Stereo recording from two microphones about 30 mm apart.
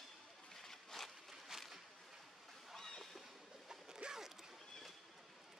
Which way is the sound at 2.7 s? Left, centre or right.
Centre.